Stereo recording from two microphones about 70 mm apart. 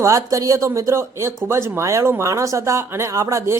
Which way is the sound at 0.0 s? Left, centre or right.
Right.